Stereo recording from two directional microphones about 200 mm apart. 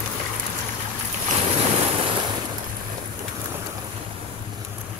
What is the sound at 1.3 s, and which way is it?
Waves, 30° right (ahead or behind).